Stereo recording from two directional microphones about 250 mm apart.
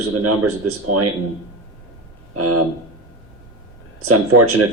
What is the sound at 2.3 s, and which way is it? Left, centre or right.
Speech, right.